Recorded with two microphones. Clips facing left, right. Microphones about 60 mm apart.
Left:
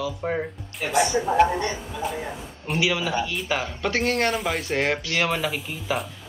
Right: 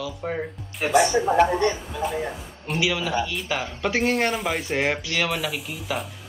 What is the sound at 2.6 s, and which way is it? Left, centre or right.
Speech, centre.